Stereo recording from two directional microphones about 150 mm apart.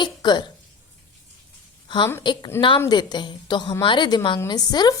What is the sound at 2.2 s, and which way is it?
A woman's voice, 30° left (ahead or behind).